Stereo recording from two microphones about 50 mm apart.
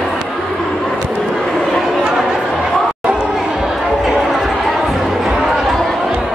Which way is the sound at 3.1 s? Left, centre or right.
Centre.